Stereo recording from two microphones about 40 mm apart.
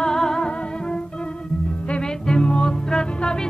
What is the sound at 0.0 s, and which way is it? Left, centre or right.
Music, centre.